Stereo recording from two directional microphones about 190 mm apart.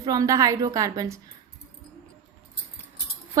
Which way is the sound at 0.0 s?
20° right (ahead or behind).